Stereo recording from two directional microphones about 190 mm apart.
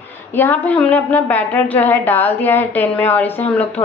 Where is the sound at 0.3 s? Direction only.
10° left (ahead or behind).